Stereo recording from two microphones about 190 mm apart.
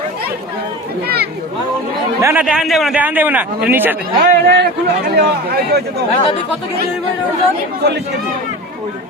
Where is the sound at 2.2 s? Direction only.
15° right (ahead or behind).